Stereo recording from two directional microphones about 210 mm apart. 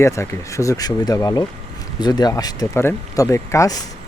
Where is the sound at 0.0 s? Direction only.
15° left (ahead or behind).